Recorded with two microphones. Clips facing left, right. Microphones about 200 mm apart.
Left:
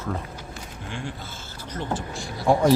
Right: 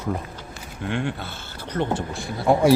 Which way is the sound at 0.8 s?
65° right (ahead or behind).